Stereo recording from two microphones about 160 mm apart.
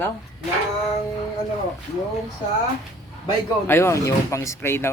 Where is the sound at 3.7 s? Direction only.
15° left (ahead or behind).